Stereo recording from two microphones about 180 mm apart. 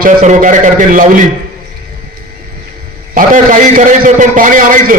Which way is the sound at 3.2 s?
45° right (ahead or behind).